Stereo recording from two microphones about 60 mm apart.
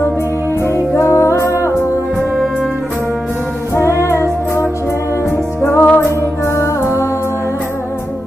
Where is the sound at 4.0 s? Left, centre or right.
Left.